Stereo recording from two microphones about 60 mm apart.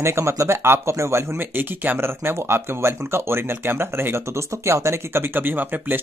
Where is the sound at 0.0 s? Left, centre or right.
Right.